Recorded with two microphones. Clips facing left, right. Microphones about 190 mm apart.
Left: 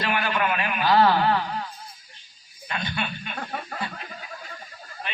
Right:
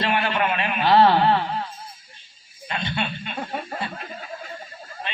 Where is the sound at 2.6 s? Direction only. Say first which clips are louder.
Right 3 dB; 25° right (ahead or behind).